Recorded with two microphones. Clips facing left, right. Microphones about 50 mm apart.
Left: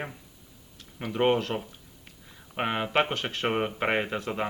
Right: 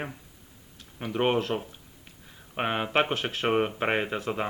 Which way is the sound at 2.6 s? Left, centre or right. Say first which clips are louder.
Even; centre.